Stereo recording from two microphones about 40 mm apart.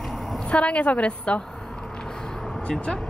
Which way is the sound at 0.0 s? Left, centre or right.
Centre.